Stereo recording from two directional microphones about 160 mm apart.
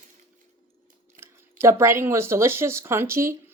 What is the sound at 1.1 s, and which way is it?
Speech, 15° right (ahead or behind).